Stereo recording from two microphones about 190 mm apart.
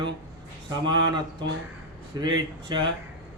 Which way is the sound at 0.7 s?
25° right (ahead or behind).